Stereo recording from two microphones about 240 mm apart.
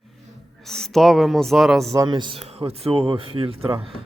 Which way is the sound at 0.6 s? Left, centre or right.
Centre.